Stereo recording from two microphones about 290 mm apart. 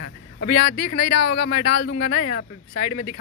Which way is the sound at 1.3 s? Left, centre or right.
Left.